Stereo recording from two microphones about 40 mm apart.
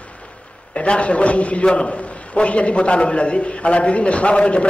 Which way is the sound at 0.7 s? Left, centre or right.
Left.